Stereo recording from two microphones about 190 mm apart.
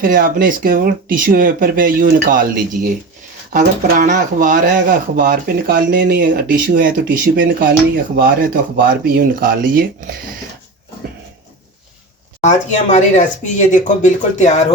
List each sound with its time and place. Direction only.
0.0 s speech: 50° right (ahead or behind)
12.4 s speech: 40° left (ahead or behind)